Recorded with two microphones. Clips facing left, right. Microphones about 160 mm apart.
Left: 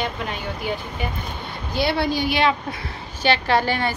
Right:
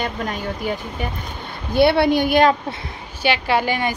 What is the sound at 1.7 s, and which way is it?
Speech, 60° right (ahead or behind).